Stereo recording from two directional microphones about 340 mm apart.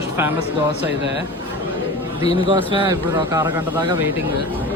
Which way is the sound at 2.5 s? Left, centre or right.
Centre.